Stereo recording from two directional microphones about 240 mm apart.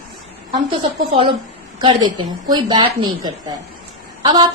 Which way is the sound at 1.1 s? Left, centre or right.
Right.